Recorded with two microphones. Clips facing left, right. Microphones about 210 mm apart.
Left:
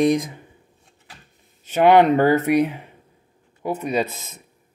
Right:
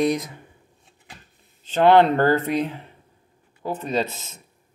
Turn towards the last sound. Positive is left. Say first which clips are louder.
# left 1 dB
turn(degrees=10)  # may be behind; listen again after turning